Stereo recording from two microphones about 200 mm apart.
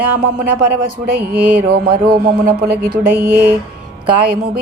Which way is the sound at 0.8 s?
45° right (ahead or behind).